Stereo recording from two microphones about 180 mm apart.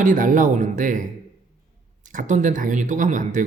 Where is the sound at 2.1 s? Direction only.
45° right (ahead or behind).